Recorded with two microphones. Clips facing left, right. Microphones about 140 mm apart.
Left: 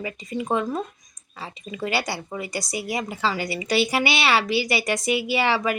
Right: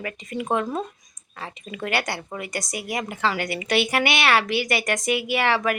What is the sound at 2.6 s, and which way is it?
Speech, 50° right (ahead or behind).